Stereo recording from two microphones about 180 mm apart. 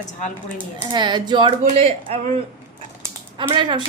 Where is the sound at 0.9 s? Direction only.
25° right (ahead or behind).